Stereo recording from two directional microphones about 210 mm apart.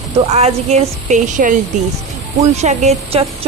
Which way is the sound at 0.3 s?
30° right (ahead or behind).